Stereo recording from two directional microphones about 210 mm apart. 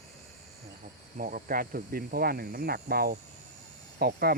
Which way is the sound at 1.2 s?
40° right (ahead or behind).